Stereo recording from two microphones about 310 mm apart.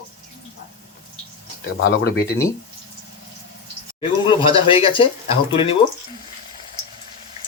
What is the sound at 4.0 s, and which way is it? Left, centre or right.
Speech, centre.